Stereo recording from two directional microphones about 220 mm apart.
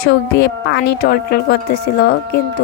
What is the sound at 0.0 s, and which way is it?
Speech, 45° left (ahead or behind).